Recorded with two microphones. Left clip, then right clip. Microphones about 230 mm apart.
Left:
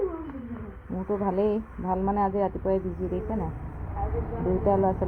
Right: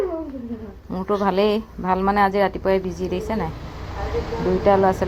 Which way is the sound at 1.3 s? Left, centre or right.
Right.